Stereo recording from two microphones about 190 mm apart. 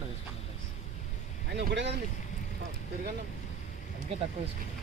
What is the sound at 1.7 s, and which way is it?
Speech, 65° right (ahead or behind).